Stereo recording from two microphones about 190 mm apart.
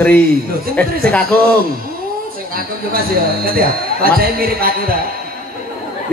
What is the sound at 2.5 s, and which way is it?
Speech, 50° right (ahead or behind).